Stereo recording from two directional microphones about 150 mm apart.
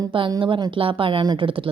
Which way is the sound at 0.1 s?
35° right (ahead or behind).